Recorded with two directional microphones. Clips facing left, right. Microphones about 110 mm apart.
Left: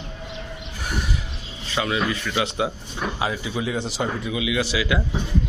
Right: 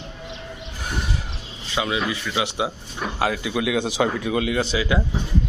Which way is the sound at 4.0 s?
90° right.